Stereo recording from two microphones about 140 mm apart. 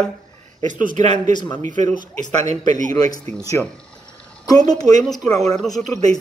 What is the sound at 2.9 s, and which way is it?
Speech, 25° left (ahead or behind).